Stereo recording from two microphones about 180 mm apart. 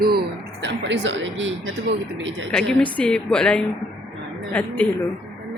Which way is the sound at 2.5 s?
5° left (ahead or behind).